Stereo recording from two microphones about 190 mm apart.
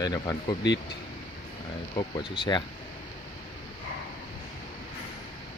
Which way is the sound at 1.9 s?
25° left (ahead or behind).